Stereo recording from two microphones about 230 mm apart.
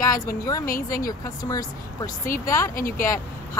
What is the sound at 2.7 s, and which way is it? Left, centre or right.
Speech, left.